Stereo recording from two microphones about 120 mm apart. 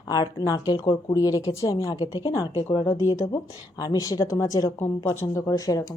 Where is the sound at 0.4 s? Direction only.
35° left (ahead or behind).